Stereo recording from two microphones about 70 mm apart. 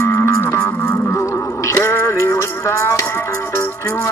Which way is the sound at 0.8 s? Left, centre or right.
Left.